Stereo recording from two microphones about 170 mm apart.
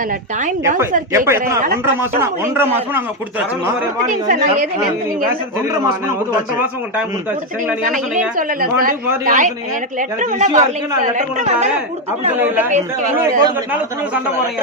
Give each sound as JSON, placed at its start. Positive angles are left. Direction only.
{"t": 1.1, "sound": "a man's voice", "side_deg": -15}
{"t": 4.3, "sound": "speech", "side_deg": -50}
{"t": 7.9, "sound": "speech", "side_deg": -50}
{"t": 12.3, "sound": "a man's voice", "side_deg": -10}